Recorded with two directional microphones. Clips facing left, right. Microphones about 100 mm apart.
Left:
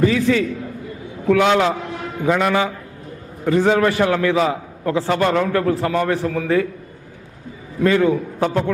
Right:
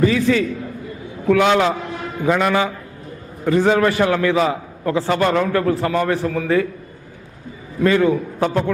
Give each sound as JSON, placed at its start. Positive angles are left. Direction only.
{"t": 0.1, "sound": "a man's voice", "side_deg": -15}
{"t": 7.9, "sound": "a man's voice", "side_deg": -20}